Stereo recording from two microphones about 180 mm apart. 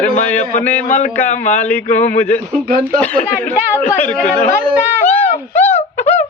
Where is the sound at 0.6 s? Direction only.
10° left (ahead or behind).